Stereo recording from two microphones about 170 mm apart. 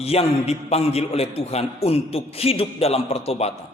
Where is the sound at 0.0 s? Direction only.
35° left (ahead or behind).